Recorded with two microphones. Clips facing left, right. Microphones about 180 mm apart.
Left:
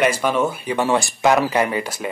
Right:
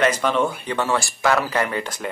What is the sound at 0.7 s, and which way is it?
Speech, 20° left (ahead or behind).